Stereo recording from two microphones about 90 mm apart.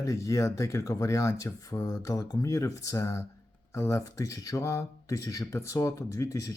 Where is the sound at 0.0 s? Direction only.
35° left (ahead or behind).